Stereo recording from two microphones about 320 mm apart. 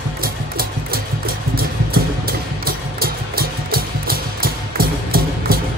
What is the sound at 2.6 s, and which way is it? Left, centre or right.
Music, right.